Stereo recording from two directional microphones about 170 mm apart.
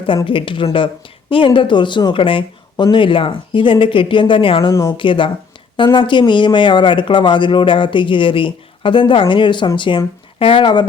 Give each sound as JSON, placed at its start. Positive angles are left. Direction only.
{"t": 0.3, "sound": "speech", "side_deg": 30}
{"t": 4.7, "sound": "a woman's voice", "side_deg": 15}
{"t": 4.9, "sound": "speech", "side_deg": 30}